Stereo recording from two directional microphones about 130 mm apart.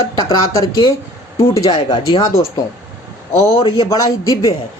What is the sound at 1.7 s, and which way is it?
Speech, 35° left (ahead or behind).